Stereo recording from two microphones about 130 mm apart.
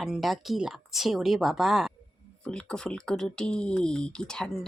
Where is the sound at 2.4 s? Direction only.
5° left (ahead or behind).